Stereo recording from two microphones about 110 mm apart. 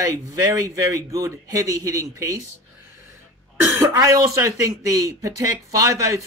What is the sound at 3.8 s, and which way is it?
Speech, 30° right (ahead or behind).